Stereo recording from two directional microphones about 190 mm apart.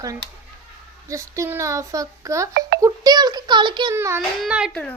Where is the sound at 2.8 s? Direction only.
20° right (ahead or behind).